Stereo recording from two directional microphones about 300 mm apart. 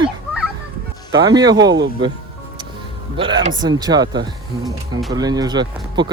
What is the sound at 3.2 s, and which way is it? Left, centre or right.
Speech, centre.